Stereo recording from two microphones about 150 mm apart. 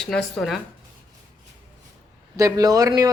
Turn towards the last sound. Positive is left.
turn(degrees=-25)  # may be behind; listen again after turning